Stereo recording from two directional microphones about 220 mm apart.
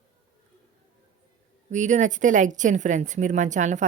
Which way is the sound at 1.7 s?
35° right (ahead or behind).